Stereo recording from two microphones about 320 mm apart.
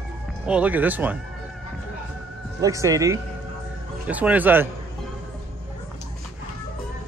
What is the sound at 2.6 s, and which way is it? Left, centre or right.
A man's voice, centre.